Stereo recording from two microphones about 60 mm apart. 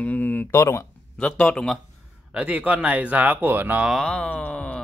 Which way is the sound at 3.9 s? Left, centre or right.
Centre.